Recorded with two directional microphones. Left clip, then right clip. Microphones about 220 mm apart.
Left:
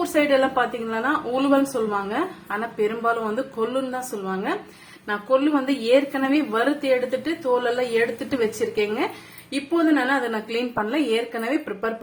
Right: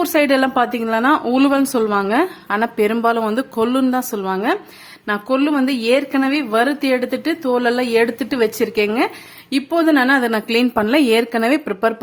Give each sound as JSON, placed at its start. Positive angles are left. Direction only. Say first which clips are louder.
{"t": 0.1, "sound": "a woman's voice", "louder": "right 2 dB", "side_deg": -55}